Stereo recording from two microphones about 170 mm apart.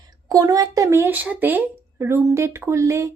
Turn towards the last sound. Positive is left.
turn(degrees=-15)  # may be behind; listen again after turning